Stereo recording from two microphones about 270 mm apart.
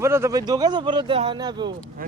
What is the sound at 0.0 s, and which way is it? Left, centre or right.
Speech, centre.